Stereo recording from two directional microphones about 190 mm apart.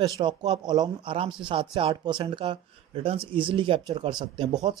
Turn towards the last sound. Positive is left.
turn(degrees=-25)  # may be behind; listen again after turning